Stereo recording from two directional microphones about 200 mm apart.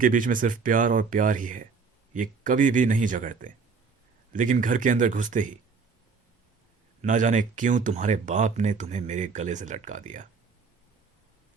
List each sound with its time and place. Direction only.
0.0 s speech: 40° right (ahead or behind)
7.0 s speech: 40° right (ahead or behind)